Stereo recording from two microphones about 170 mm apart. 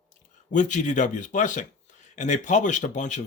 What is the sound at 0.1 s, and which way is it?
Speech, 45° left (ahead or behind).